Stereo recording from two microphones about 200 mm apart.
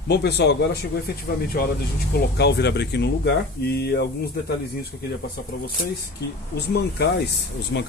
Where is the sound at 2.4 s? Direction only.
55° left (ahead or behind).